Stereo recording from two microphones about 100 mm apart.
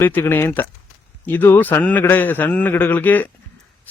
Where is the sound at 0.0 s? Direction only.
20° left (ahead or behind).